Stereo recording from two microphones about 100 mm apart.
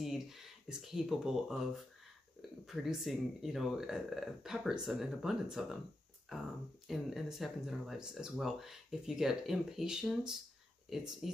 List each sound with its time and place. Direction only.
0.0 s speech: 5° right (ahead or behind)
2.6 s speech: 5° right (ahead or behind)